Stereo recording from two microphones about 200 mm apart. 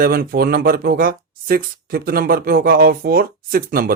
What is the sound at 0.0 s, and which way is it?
Speech, 45° right (ahead or behind).